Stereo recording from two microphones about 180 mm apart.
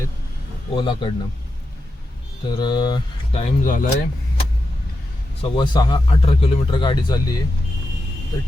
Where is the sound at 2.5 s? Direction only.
25° left (ahead or behind).